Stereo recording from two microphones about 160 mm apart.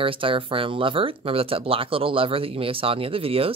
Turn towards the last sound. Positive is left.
turn(degrees=-35)  # may be behind; listen again after turning